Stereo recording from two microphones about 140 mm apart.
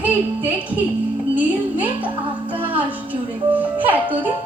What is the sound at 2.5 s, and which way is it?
Music, 40° right (ahead or behind).